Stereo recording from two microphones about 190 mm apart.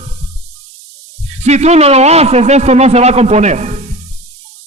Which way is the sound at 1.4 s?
35° right (ahead or behind).